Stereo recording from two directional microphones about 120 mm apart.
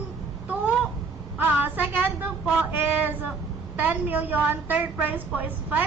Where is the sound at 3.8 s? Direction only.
15° right (ahead or behind).